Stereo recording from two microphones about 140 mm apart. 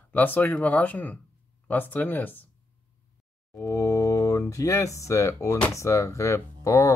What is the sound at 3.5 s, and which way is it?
Speech, 20° left (ahead or behind).